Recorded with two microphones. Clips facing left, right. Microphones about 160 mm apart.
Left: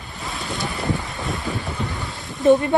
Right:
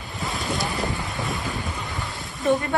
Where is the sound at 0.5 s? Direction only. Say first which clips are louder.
Left 3 dB; centre (ahead or behind).